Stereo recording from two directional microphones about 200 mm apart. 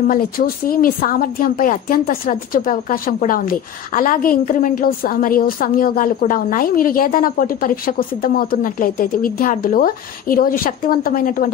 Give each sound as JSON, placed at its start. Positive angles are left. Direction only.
{"t": 0.1, "sound": "a woman's voice", "side_deg": 45}